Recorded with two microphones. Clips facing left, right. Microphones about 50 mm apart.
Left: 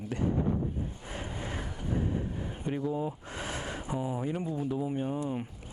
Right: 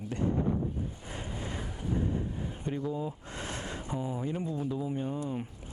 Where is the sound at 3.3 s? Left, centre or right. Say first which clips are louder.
Left 2 dB; centre.